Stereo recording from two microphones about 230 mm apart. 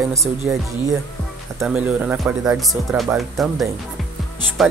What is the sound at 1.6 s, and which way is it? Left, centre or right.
Speech, centre.